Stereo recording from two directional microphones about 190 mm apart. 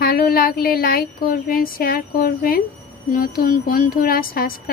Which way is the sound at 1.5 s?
50° left (ahead or behind).